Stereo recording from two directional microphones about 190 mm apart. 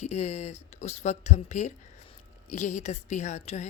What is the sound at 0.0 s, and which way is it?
A woman's voice, 35° left (ahead or behind).